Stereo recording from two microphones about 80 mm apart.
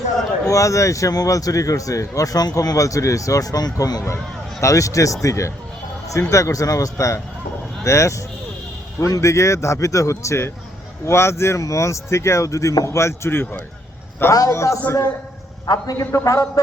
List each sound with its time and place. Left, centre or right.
0.4 s speech: left
4.6 s speech: left
14.3 s speech: left
15.6 s speech: left